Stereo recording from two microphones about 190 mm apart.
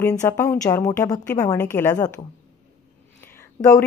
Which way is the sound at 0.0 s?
15° left (ahead or behind).